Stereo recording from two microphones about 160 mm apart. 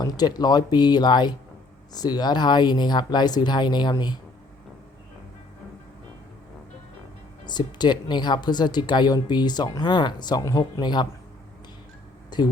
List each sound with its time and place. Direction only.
0.0 s speech: 25° left (ahead or behind)
7.4 s speech: 25° left (ahead or behind)
12.3 s speech: 25° left (ahead or behind)